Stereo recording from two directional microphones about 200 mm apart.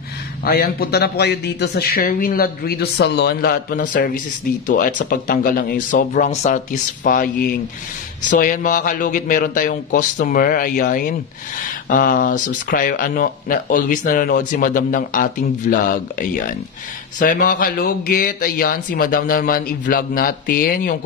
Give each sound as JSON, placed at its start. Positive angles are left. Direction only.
{"t": 0.4, "sound": "speech", "side_deg": 50}